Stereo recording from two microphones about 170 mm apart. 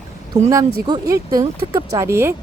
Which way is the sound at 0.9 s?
20° right (ahead or behind).